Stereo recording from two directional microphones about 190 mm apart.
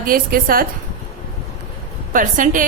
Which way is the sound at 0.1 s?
50° right (ahead or behind).